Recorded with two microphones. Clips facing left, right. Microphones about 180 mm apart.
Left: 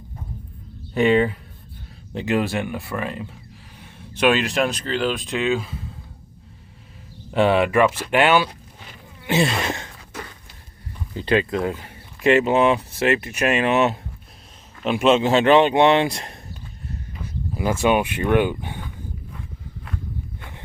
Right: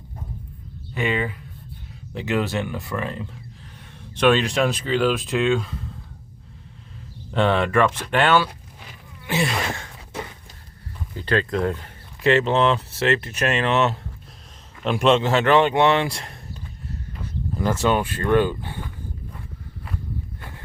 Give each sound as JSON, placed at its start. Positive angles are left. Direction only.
{"t": 0.9, "sound": "speech", "side_deg": 45}
{"t": 2.2, "sound": "speech", "side_deg": 15}
{"t": 7.3, "sound": "speech", "side_deg": 10}
{"t": 9.2, "sound": "speech", "side_deg": 25}
{"t": 11.2, "sound": "speech", "side_deg": 15}
{"t": 11.5, "sound": "speech", "side_deg": 5}
{"t": 15.3, "sound": "speech", "side_deg": 20}